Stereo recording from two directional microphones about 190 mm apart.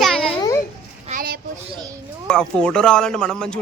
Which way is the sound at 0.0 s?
5° left (ahead or behind).